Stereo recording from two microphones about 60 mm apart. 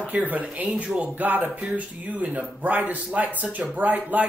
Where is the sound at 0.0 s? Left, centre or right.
Right.